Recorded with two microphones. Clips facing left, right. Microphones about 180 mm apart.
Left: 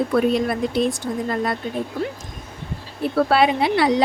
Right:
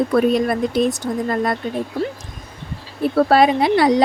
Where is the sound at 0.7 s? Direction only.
45° right (ahead or behind).